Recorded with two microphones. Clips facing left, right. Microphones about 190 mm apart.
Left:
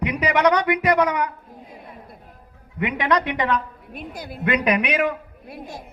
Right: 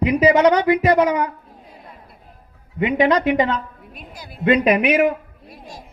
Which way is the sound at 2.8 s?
25° right (ahead or behind).